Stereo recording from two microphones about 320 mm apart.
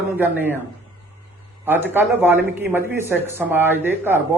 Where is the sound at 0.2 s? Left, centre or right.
Centre.